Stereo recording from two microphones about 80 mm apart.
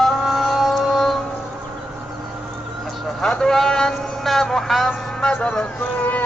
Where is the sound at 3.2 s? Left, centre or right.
Centre.